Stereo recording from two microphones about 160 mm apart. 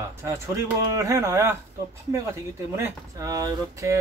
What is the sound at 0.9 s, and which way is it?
Speech, 20° right (ahead or behind).